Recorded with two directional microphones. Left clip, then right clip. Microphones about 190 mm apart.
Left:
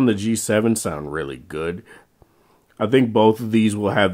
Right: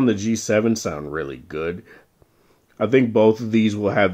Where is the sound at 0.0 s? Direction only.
25° left (ahead or behind).